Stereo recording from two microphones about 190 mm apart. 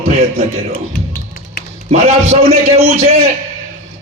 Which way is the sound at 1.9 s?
35° right (ahead or behind).